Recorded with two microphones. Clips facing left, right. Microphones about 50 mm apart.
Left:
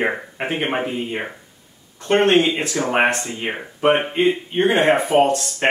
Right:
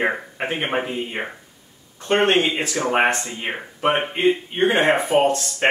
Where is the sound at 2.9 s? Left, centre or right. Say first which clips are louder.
Left 1 dB; centre.